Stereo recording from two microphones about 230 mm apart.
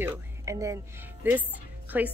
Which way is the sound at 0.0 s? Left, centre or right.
Centre.